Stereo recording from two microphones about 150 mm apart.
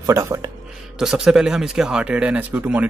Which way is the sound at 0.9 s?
5° right (ahead or behind).